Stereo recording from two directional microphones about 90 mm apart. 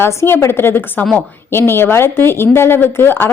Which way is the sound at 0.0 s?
30° left (ahead or behind).